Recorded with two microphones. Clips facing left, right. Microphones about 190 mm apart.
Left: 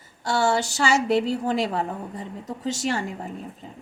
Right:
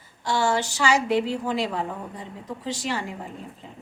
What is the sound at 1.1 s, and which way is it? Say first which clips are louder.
A woman's voice: left 2 dB; 40° left (ahead or behind).